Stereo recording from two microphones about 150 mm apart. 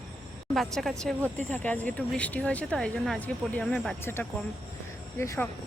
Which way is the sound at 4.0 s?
15° left (ahead or behind).